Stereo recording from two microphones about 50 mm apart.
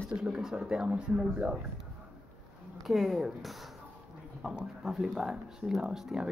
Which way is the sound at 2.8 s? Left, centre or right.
Centre.